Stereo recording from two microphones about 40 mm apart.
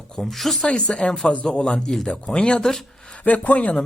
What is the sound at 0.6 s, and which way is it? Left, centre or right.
Speech, left.